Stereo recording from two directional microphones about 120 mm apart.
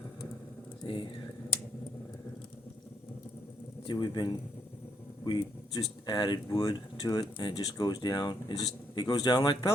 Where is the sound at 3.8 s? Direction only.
40° left (ahead or behind).